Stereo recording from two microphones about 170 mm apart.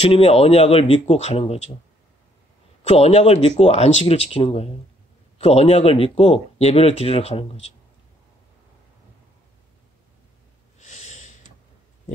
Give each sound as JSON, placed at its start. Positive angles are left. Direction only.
{"t": 0.0, "sound": "speech", "side_deg": 35}
{"t": 2.8, "sound": "speech", "side_deg": 40}
{"t": 10.8, "sound": "snort", "side_deg": 45}